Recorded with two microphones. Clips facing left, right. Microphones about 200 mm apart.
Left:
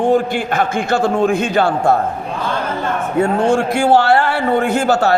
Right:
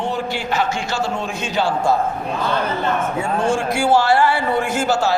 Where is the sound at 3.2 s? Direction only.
65° left (ahead or behind).